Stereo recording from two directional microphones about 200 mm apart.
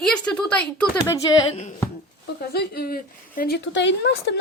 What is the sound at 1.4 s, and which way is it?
Speech, 35° left (ahead or behind).